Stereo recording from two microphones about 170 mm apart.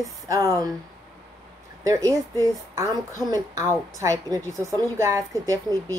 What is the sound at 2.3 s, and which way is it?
A woman's voice, 20° right (ahead or behind).